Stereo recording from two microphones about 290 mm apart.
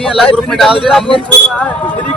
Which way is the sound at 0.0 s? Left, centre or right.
Centre.